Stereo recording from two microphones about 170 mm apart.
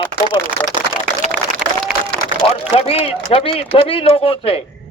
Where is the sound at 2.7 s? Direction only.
35° left (ahead or behind).